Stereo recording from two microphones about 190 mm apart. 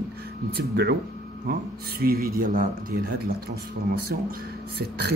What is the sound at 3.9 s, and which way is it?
Speech, 55° right (ahead or behind).